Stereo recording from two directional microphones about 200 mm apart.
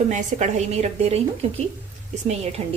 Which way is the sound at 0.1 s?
35° right (ahead or behind).